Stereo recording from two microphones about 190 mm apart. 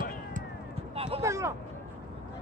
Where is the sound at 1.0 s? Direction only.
30° right (ahead or behind).